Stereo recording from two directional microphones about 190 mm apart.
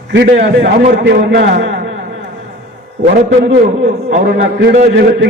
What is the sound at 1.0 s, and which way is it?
Speech, 60° right (ahead or behind).